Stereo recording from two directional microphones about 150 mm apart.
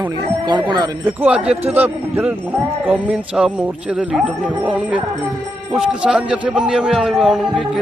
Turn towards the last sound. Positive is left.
turn(degrees=-5)  # may be behind; listen again after turning